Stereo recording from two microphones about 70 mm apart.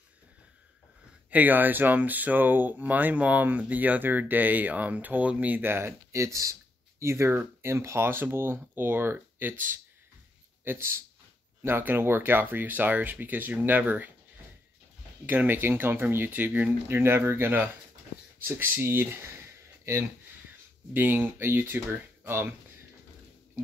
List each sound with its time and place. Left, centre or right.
1.3 s a man's voice: right
15.2 s speech: right